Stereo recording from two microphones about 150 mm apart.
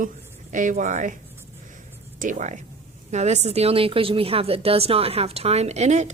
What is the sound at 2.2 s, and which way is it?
A woman's voice, 55° right (ahead or behind).